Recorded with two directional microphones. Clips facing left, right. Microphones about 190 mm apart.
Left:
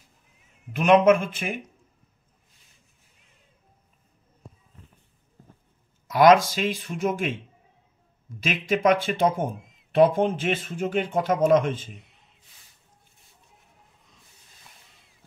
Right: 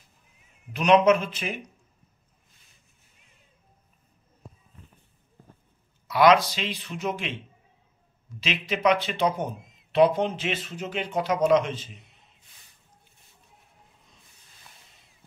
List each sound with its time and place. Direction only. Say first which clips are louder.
0.7 s speech: left 2 dB; 50° left (ahead or behind)
6.0 s speech: left 2 dB; 45° left (ahead or behind)
8.4 s speech: left 4 dB; 50° left (ahead or behind)